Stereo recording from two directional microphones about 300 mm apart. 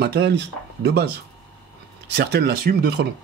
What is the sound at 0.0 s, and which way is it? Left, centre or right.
Speech, right.